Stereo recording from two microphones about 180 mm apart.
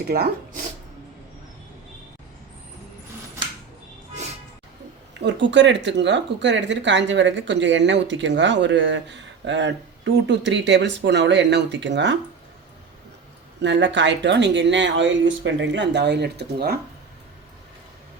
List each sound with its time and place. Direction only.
0.1 s speech: 60° right (ahead or behind)
5.2 s speech: 85° right
13.6 s speech: 80° right; by 16.7 s 65° right (ahead or behind)